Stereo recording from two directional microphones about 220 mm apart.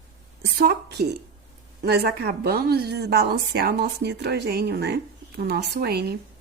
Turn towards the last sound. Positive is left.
turn(degrees=-45)  # may be behind; listen again after turning